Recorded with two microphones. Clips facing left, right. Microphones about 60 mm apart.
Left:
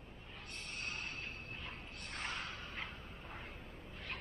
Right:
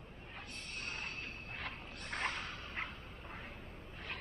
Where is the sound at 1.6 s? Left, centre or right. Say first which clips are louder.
Right 3 dB; right.